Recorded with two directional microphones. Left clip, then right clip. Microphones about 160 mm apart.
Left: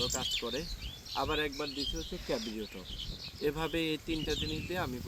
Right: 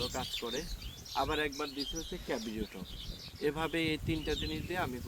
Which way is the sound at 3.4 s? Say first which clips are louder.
Even; 35° right (ahead or behind).